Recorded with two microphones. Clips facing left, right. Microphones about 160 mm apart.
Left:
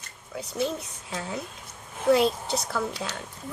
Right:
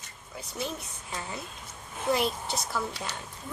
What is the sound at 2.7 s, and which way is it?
Speech, 90° left.